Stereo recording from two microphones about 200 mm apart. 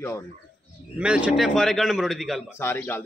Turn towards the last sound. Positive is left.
turn(degrees=10)  # may be behind; listen again after turning